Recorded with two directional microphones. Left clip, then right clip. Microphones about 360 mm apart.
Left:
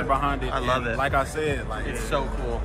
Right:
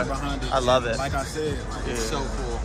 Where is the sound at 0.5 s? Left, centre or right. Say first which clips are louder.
Right 4 dB; right.